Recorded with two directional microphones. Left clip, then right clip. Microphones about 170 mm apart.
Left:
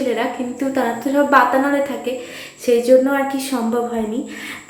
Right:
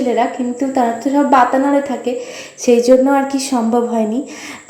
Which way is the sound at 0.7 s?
20° right (ahead or behind).